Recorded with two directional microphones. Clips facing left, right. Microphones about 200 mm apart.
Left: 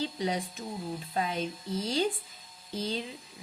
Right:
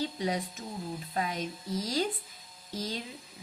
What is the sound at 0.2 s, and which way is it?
A woman's voice, 30° left (ahead or behind).